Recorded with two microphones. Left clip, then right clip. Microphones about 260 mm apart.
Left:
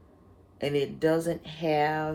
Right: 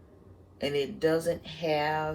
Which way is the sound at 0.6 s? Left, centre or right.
Left.